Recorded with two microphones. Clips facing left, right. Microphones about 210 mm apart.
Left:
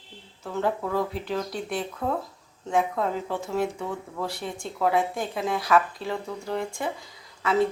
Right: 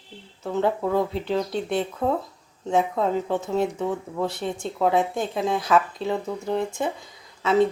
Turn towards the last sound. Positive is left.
turn(degrees=-25)  # may be behind; listen again after turning